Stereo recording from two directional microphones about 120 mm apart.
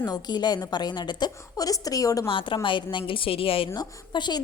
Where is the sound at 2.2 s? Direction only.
45° left (ahead or behind).